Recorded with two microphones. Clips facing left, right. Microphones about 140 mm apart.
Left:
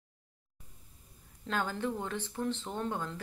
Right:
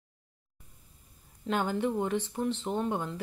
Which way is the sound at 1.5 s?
20° right (ahead or behind).